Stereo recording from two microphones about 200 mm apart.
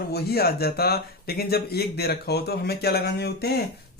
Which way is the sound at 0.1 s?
50° left (ahead or behind).